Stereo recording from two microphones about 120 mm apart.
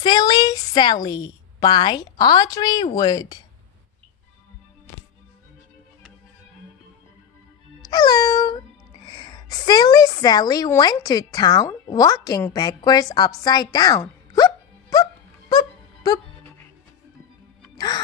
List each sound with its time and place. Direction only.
0.0 s a woman's voice: 35° left (ahead or behind)
7.9 s a woman's voice: 35° left (ahead or behind)
14.3 s hiccup: 30° left (ahead or behind)
15.5 s music: 35° left (ahead or behind)
17.7 s music: 35° left (ahead or behind)